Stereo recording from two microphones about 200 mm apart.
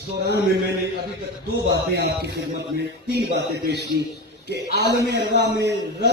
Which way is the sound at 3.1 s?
55° right (ahead or behind).